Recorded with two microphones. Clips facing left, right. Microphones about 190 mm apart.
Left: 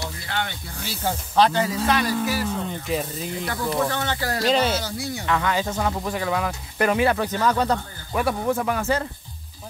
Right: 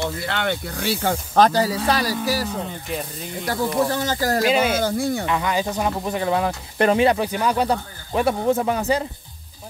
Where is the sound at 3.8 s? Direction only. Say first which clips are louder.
Right 4 dB; 35° right (ahead or behind).